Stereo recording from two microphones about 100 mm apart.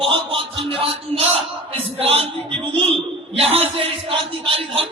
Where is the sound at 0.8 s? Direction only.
80° right.